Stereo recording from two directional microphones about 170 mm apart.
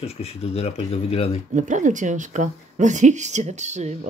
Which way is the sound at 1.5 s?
45° right (ahead or behind).